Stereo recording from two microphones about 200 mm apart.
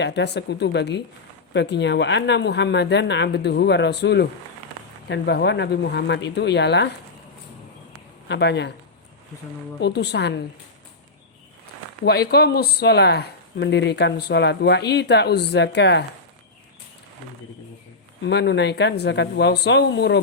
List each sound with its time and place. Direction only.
0.0 s speech: 60° left (ahead or behind)
8.3 s speech: 60° left (ahead or behind)
9.8 s speech: 55° left (ahead or behind)
12.0 s speech: 55° left (ahead or behind)
18.2 s speech: 55° left (ahead or behind)